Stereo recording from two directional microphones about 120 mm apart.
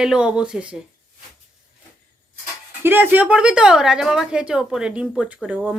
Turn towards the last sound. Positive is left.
turn(degrees=-10)  # may be behind; listen again after turning